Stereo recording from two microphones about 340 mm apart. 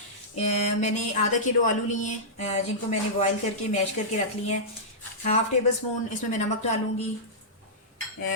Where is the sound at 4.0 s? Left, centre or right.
Centre.